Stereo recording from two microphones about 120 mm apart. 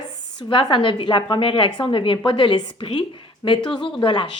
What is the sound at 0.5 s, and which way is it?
A woman's voice, 40° left (ahead or behind).